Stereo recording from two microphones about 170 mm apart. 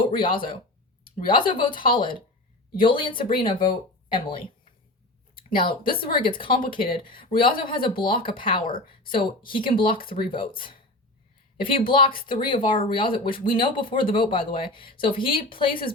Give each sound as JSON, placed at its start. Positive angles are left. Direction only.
{"t": 0.0, "sound": "speech", "side_deg": 30}